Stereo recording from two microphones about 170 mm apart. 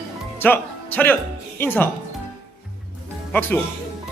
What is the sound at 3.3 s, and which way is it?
Speech, 10° left (ahead or behind).